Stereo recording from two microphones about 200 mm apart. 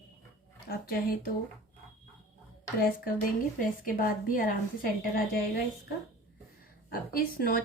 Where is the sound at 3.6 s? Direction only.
45° left (ahead or behind).